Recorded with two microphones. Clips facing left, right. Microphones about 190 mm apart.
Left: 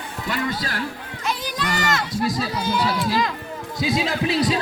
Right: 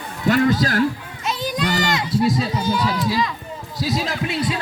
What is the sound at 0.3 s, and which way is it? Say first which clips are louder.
Speech: right 10 dB; 50° right (ahead or behind).